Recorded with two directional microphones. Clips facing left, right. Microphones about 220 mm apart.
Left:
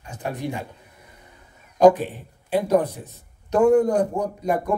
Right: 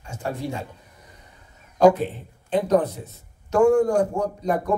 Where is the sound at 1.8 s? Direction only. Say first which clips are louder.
Left 1 dB; 15° left (ahead or behind).